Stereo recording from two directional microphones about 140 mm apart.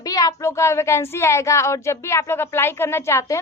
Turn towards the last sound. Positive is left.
turn(degrees=20)  # may be behind; listen again after turning